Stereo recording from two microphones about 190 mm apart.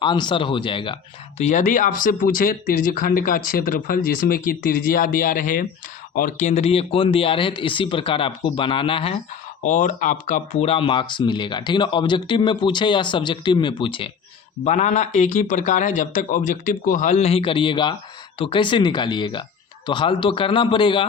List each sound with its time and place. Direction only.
0.0 s speech: 25° left (ahead or behind)
1.4 s speech: 40° left (ahead or behind)
9.6 s speech: 40° left (ahead or behind)
14.6 s speech: 40° left (ahead or behind)